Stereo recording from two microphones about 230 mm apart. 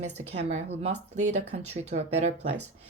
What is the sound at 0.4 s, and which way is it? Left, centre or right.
Speech, right.